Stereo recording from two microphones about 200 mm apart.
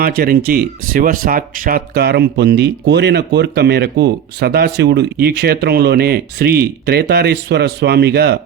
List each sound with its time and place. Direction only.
0.0 s speech: 50° right (ahead or behind)